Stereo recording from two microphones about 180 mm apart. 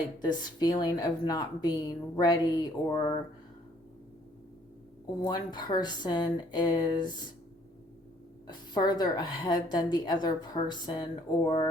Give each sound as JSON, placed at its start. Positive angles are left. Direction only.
{"t": 0.2, "sound": "a woman's voice", "side_deg": 20}
{"t": 5.2, "sound": "a woman's voice", "side_deg": 20}
{"t": 8.4, "sound": "a woman's voice", "side_deg": 25}